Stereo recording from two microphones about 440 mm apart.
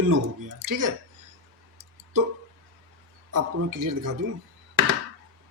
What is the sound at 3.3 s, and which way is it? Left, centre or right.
Speech, right.